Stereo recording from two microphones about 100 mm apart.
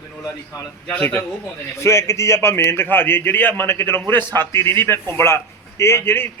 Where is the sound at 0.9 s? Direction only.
20° left (ahead or behind).